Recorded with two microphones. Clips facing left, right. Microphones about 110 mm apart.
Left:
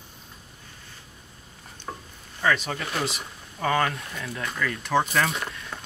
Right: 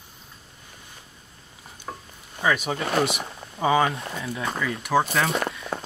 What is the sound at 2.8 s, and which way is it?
Speech, 60° right (ahead or behind).